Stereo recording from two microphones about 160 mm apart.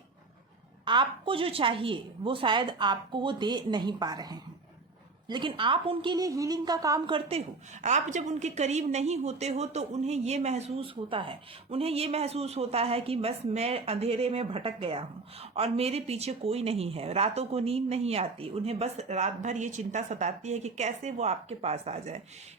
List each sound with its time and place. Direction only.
0.9 s a woman's voice: 30° right (ahead or behind)
7.3 s a woman's voice: 45° right (ahead or behind)